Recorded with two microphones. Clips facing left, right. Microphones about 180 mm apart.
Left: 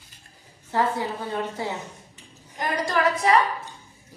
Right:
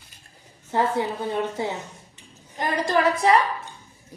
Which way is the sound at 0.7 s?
20° right (ahead or behind).